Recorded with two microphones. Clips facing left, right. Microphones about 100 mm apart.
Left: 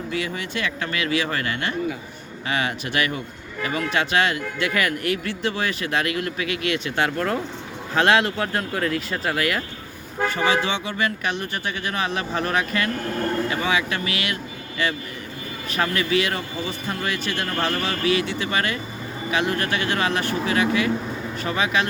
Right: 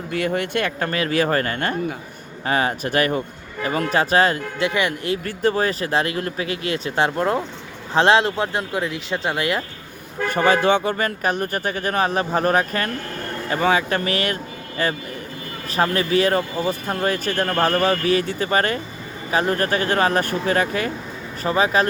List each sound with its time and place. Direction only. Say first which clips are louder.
0.1 s speech: right 8 dB; 50° right (ahead or behind)
4.7 s speech: right 1 dB; 25° right (ahead or behind)
5.2 s speech: right 5 dB; 40° right (ahead or behind); by 9.6 s 25° right (ahead or behind)
10.2 s speech: right 5 dB; 50° right (ahead or behind)